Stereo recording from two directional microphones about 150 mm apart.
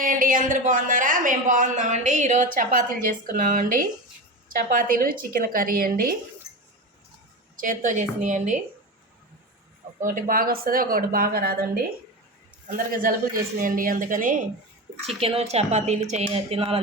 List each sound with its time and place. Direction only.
0.0 s speech: 65° right (ahead or behind)
7.6 s speech: 60° right (ahead or behind)
10.0 s speech: 70° right (ahead or behind); by 11.8 s 90° right
12.7 s speech: 70° right (ahead or behind)
15.0 s speech: 40° right (ahead or behind)